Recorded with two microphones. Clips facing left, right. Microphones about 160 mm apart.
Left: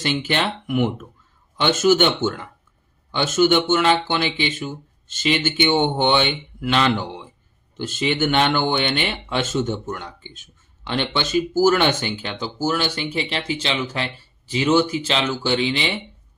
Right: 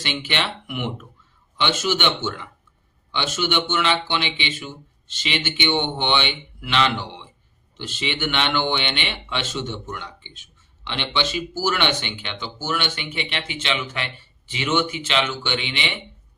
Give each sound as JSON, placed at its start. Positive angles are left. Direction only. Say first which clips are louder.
{"t": 0.0, "sound": "speech", "louder": "left 5 dB", "side_deg": 40}